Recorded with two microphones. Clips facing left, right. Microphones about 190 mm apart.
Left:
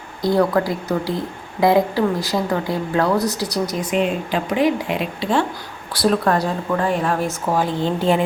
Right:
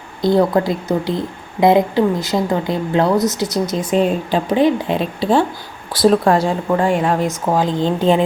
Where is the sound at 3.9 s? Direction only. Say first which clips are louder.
Right 5 dB; 35° right (ahead or behind).